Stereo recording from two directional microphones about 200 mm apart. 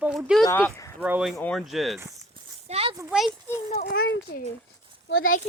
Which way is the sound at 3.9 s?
50° left (ahead or behind).